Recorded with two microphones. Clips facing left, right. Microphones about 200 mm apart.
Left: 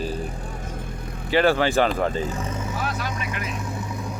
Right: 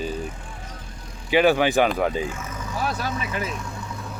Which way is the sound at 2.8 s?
40° right (ahead or behind).